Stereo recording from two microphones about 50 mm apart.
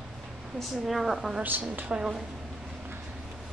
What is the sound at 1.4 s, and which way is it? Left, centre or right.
Speech, right.